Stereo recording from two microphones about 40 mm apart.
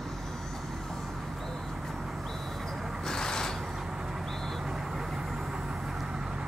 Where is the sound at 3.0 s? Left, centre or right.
Centre.